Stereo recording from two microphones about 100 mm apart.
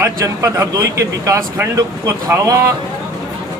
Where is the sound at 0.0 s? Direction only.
35° right (ahead or behind).